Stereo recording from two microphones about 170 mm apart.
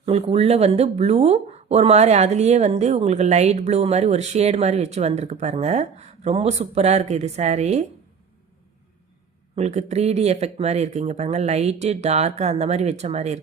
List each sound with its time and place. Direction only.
0.0 s speech: 35° right (ahead or behind)
9.6 s speech: 40° right (ahead or behind)